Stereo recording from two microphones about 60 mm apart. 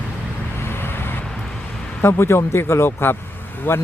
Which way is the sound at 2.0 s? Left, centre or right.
Left.